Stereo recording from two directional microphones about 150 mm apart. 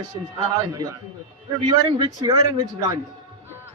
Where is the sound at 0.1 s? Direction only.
30° right (ahead or behind).